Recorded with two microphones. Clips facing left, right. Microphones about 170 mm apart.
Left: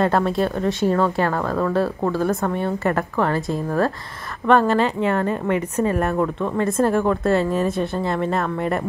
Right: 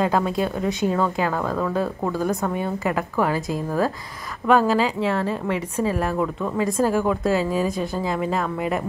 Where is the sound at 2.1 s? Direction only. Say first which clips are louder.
Left 2 dB; 20° right (ahead or behind).